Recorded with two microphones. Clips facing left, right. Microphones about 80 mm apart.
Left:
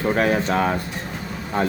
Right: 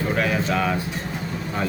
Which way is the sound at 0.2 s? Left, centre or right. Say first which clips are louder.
Left 3 dB; left.